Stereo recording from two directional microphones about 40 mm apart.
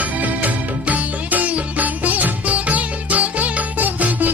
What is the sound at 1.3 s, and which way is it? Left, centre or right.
Music, right.